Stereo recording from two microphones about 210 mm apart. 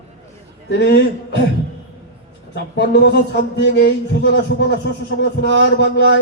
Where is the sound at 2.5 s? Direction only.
55° left (ahead or behind).